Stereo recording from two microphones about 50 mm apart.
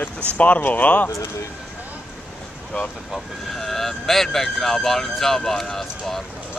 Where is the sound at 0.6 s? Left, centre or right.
Left.